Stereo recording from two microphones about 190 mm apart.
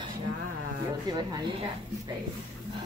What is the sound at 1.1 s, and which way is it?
Speech, 25° right (ahead or behind).